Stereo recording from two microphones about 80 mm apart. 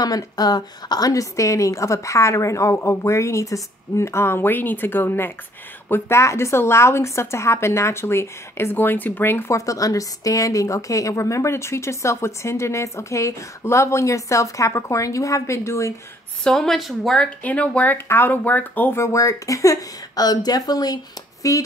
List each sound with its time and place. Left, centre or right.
0.0 s a woman's voice: left
9.5 s a woman's voice: left
16.4 s speech: centre
17.4 s speech: centre
17.9 s speech: left
18.9 s speech: left